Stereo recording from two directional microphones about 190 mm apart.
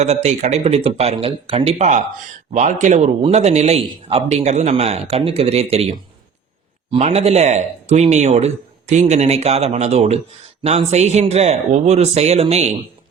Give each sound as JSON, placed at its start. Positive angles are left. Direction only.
{"t": 0.0, "sound": "a man's voice", "side_deg": -35}